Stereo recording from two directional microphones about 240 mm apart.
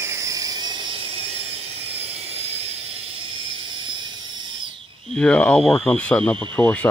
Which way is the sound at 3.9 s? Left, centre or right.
Centre.